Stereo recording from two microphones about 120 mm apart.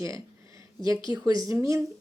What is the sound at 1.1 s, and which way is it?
Speech, 30° right (ahead or behind).